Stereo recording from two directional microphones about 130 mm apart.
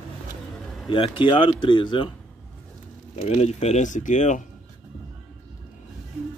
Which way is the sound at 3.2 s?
55° left (ahead or behind).